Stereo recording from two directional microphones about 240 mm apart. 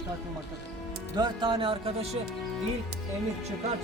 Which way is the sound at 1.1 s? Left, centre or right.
Centre.